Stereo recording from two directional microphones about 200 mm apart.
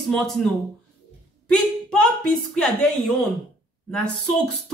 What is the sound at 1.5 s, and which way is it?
A woman's voice, 5° left (ahead or behind).